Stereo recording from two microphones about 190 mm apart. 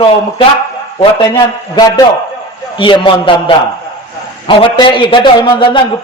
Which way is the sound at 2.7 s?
25° left (ahead or behind).